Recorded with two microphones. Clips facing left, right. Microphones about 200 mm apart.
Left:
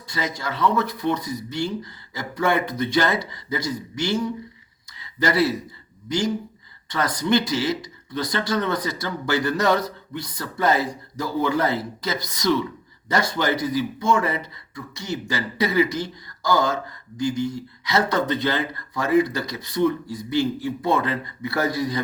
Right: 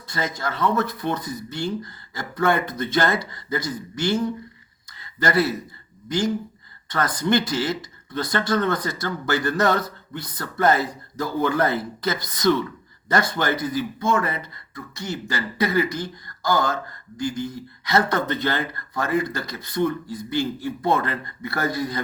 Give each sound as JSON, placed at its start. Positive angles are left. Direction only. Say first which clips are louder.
{"t": 0.1, "sound": "speech", "louder": "right 1 dB", "side_deg": -50}
{"t": 4.9, "sound": "a sound", "louder": "left 1 dB", "side_deg": -50}
{"t": 6.1, "sound": "speech", "louder": "even", "side_deg": -55}